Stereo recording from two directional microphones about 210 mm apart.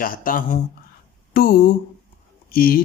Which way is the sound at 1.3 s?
45° left (ahead or behind).